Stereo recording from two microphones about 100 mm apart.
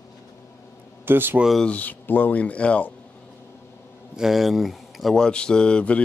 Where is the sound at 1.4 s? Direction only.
Centre (ahead or behind).